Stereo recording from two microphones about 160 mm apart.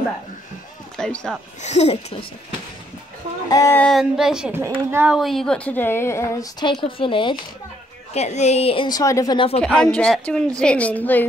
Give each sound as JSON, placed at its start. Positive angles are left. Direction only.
{"t": 0.9, "sound": "speech", "side_deg": 5}
{"t": 1.6, "sound": "speech", "side_deg": 45}
{"t": 3.4, "sound": "a woman's voice", "side_deg": 20}
{"t": 3.7, "sound": "a woman's voice", "side_deg": 5}
{"t": 4.0, "sound": "a woman's voice", "side_deg": -5}
{"t": 4.6, "sound": "a woman's voice", "side_deg": -15}
{"t": 5.1, "sound": "a woman's voice", "side_deg": 0}
{"t": 6.6, "sound": "speech", "side_deg": 30}
{"t": 8.1, "sound": "speech", "side_deg": 45}
{"t": 8.8, "sound": "a woman's voice", "side_deg": 20}
{"t": 9.6, "sound": "a woman's voice", "side_deg": 5}